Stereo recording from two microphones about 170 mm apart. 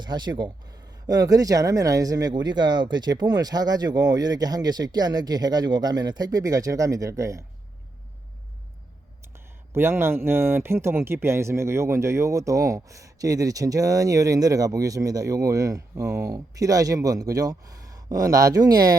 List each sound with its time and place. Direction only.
0.0 s speech: 25° right (ahead or behind)
9.3 s speech: 15° right (ahead or behind)